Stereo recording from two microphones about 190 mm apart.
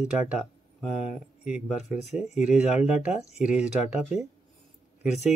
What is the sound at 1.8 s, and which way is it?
Speech, 35° left (ahead or behind).